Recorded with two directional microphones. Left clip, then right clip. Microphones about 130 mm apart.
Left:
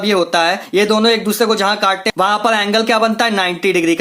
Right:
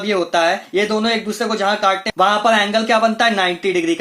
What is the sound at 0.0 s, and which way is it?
Speech, 40° left (ahead or behind).